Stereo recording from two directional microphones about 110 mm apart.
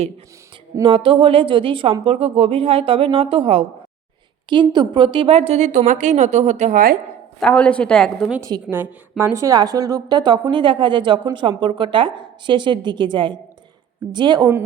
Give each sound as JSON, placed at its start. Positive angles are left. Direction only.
{"t": 0.8, "sound": "speech", "side_deg": -55}
{"t": 4.4, "sound": "a woman's voice", "side_deg": -45}
{"t": 7.3, "sound": "speech", "side_deg": 10}
{"t": 8.4, "sound": "a woman's voice", "side_deg": -40}
{"t": 8.7, "sound": "a woman's voice", "side_deg": -20}